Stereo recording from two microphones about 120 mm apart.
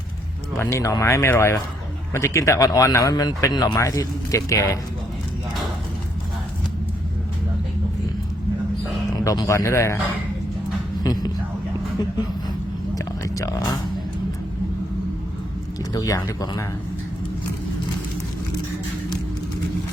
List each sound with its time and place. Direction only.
0.6 s speech: 25° left (ahead or behind)
9.2 s speech: 30° left (ahead or behind)
11.0 s a sound: 35° left (ahead or behind)
13.2 s speech: 25° left (ahead or behind)
15.9 s speech: 25° left (ahead or behind)